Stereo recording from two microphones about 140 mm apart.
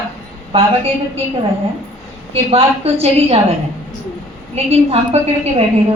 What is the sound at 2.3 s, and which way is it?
A woman's voice, 45° right (ahead or behind).